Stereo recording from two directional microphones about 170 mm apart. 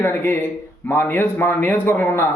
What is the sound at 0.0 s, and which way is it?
Speech, 15° left (ahead or behind).